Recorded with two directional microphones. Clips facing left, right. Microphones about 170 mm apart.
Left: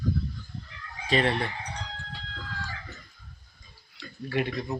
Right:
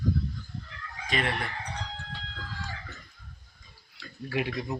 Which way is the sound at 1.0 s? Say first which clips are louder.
Left 5 dB; 30° left (ahead or behind).